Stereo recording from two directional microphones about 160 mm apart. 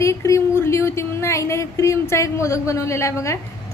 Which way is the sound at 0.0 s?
20° left (ahead or behind).